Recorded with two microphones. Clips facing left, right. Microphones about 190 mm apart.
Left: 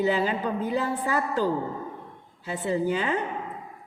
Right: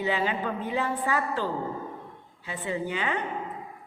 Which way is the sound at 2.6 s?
40° left (ahead or behind).